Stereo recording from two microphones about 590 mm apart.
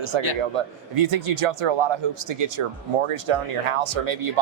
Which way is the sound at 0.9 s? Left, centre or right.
Right.